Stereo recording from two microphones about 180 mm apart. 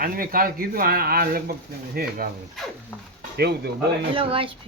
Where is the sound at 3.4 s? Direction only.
65° right (ahead or behind).